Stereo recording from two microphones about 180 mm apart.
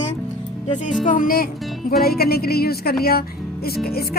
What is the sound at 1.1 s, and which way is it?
Speech, 50° left (ahead or behind).